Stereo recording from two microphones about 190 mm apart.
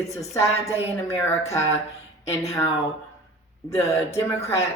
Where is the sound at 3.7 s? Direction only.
15° left (ahead or behind).